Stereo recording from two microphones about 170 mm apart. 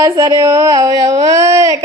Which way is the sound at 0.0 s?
20° right (ahead or behind).